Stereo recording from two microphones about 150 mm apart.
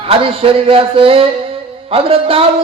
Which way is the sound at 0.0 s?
40° right (ahead or behind).